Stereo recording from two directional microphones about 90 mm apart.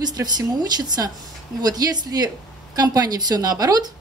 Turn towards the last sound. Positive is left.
turn(degrees=-45)  # may be behind; listen again after turning